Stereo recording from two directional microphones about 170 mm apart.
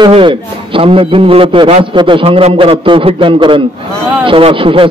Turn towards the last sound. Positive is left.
turn(degrees=-30)  # may be behind; listen again after turning